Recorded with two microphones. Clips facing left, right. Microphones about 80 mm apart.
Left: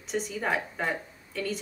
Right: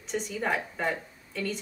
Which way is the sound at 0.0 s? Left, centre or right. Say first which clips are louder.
Even; centre.